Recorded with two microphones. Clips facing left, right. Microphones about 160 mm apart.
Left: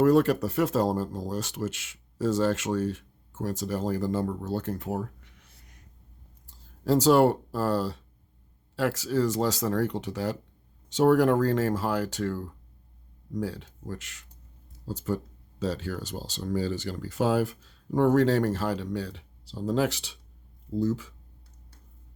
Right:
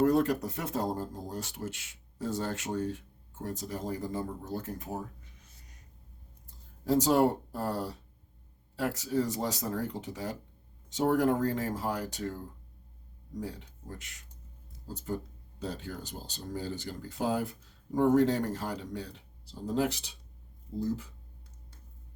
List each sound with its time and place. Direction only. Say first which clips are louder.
0.0 s speech: left 5 dB; 90° left; by 5.5 s 75° left (ahead or behind)
6.5 s speech: left 4 dB; 90° left